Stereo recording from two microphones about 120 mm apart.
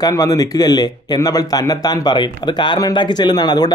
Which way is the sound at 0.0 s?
30° left (ahead or behind).